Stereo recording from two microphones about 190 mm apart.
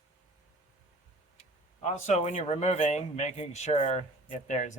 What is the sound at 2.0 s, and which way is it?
Speech, 40° left (ahead or behind).